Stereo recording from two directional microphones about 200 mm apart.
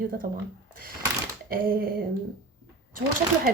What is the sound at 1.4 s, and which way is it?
Speech, 45° right (ahead or behind).